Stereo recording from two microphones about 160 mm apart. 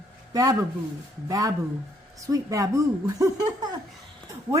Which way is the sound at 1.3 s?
20° right (ahead or behind).